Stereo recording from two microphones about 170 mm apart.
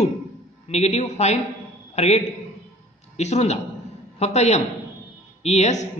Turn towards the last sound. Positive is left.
turn(degrees=40)  # may be behind; listen again after turning